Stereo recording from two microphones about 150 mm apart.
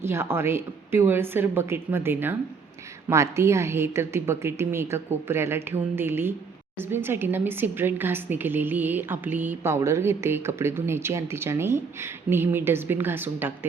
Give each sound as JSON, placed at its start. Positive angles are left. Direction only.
{"t": 0.0, "sound": "a woman's voice", "side_deg": -15}